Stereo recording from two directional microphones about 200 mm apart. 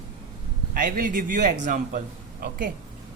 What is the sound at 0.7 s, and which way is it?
A man's voice, 45° right (ahead or behind).